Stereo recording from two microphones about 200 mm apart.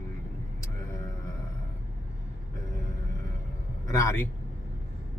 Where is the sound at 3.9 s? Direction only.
15° left (ahead or behind).